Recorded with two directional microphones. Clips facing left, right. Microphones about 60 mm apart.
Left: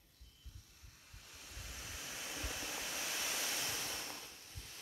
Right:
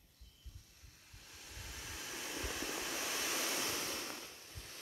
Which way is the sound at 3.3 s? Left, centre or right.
Right.